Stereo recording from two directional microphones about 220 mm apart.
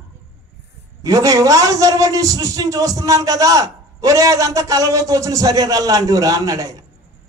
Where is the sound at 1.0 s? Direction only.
15° right (ahead or behind).